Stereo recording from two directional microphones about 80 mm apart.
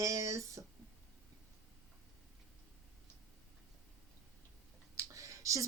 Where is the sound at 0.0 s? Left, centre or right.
Right.